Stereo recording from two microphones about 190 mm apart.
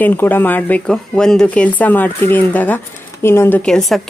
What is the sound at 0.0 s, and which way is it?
A woman's voice, 10° left (ahead or behind).